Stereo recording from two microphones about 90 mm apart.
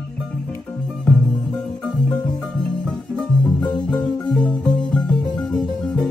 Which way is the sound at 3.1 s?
10° left (ahead or behind).